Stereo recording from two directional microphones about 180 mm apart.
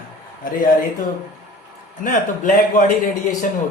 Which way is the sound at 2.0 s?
45° left (ahead or behind).